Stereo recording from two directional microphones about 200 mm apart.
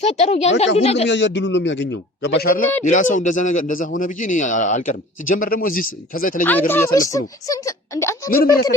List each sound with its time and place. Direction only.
0.0 s a man's voice: 30° left (ahead or behind)
1.0 s a man's voice: 65° left (ahead or behind)
2.8 s a man's voice: 40° left (ahead or behind)
6.4 s speech: 10° left (ahead or behind)